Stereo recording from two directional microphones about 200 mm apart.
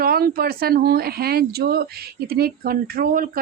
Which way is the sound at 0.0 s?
50° right (ahead or behind).